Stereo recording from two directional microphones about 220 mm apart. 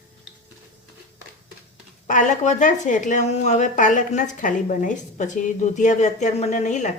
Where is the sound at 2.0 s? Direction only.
35° left (ahead or behind).